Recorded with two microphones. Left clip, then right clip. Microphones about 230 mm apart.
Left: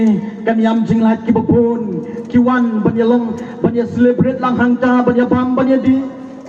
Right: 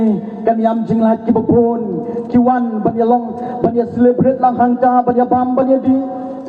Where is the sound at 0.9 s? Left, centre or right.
Left.